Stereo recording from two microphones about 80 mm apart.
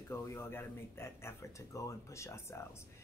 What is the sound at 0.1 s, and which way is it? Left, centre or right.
Speech, left.